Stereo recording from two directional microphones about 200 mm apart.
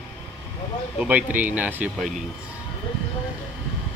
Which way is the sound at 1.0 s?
10° right (ahead or behind).